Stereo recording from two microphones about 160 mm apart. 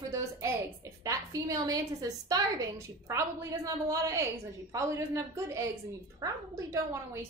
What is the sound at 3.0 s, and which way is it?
A woman's voice, 20° right (ahead or behind).